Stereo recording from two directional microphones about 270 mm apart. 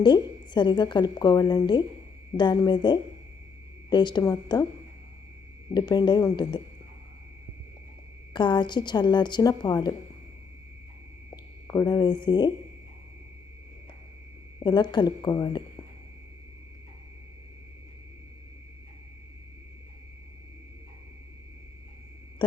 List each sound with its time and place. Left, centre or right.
0.0 s a woman's voice: centre
5.7 s a woman's voice: centre
8.3 s a woman's voice: centre
11.7 s a woman's voice: centre
14.6 s a woman's voice: centre
22.4 s a sound: centre